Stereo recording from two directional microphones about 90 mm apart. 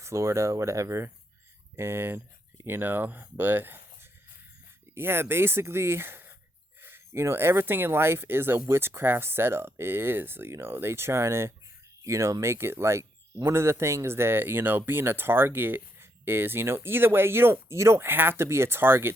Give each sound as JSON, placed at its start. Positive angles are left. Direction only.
{"t": 0.0, "sound": "speech", "side_deg": -30}